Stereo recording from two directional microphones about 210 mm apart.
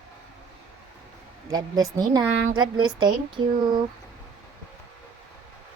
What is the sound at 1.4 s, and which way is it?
A woman's voice, 20° right (ahead or behind).